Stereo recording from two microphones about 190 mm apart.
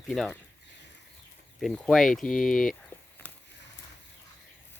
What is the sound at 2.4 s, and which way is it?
Speech, 45° left (ahead or behind).